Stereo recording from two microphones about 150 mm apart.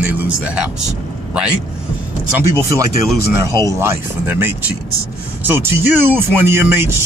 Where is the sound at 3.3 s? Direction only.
20° right (ahead or behind).